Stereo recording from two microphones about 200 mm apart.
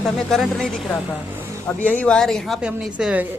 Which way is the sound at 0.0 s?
Centre (ahead or behind).